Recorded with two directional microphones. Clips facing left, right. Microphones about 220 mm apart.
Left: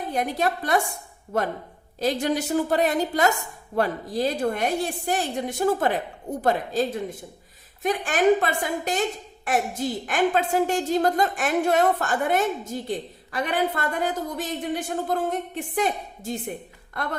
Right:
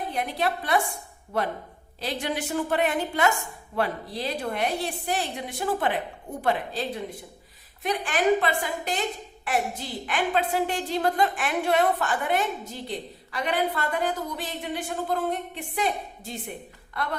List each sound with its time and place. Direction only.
0.1 s a woman's voice: 45° left (ahead or behind)